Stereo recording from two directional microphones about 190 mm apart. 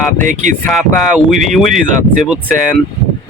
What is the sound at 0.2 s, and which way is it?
Speech, 45° right (ahead or behind).